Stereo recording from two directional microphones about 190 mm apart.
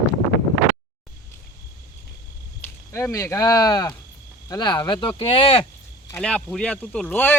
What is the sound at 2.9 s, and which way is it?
Speech, 15° left (ahead or behind).